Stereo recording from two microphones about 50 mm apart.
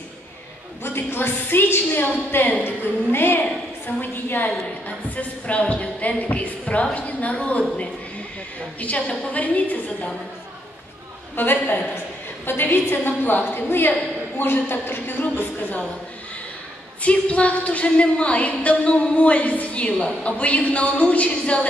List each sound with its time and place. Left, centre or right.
0.8 s a woman's voice: left
4.8 s a woman's voice: left
8.7 s a woman's voice: left
11.3 s a woman's voice: left
17.0 s a woman's voice: left